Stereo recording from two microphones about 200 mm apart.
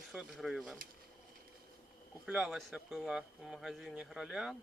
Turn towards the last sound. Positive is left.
turn(degrees=0)  # may be behind; listen again after turning